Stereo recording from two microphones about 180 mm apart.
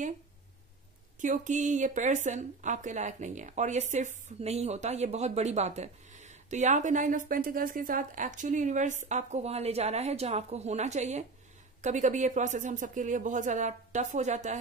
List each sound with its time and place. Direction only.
1.2 s a woman's voice: 45° right (ahead or behind)